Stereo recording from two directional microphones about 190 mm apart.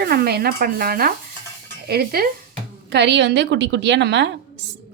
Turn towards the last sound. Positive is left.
turn(degrees=-60)  # may be behind; listen again after turning